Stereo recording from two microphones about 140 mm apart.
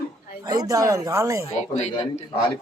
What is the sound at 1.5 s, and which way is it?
Speech, 50° left (ahead or behind).